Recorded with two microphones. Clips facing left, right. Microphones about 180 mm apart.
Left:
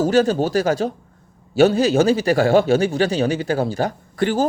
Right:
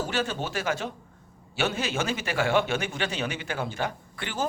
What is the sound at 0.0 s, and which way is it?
Speech, 40° left (ahead or behind).